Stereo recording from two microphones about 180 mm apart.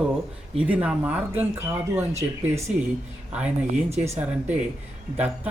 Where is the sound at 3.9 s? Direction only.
35° right (ahead or behind).